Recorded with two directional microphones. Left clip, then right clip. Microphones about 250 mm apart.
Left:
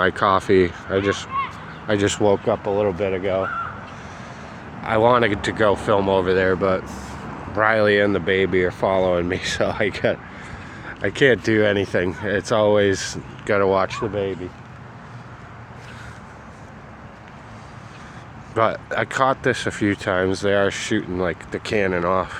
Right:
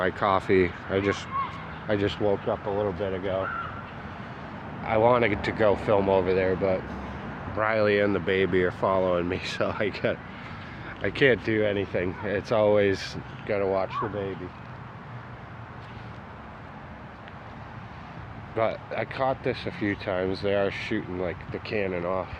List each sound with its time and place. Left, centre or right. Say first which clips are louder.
0.0 s speech: left 6 dB; centre
1.9 s speech: left 7 dB; left
4.9 s speech: left 5 dB; centre
11.5 s speech: left 7 dB; left
13.5 s speech: left 8 dB; left
18.5 s speech: left 7 dB; left